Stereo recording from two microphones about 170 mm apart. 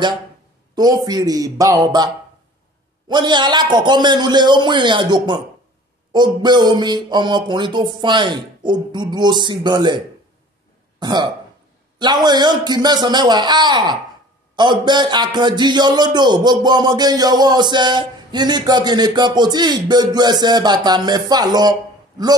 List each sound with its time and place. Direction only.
0.7 s a man's voice: 25° right (ahead or behind)
3.1 s a man's voice: 25° right (ahead or behind)